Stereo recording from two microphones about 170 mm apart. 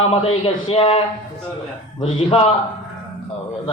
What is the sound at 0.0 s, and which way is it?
A man's voice, 35° left (ahead or behind).